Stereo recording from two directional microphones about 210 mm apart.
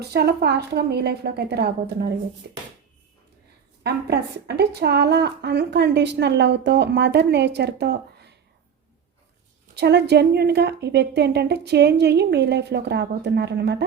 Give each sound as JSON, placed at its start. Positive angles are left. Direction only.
{"t": 0.0, "sound": "a woman's voice", "side_deg": -50}
{"t": 3.8, "sound": "a woman's voice", "side_deg": -50}
{"t": 9.7, "sound": "a woman's voice", "side_deg": -50}